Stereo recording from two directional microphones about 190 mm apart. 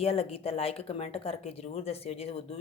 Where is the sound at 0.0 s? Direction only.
30° left (ahead or behind).